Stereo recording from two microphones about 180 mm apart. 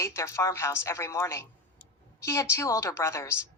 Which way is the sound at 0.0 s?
15° left (ahead or behind).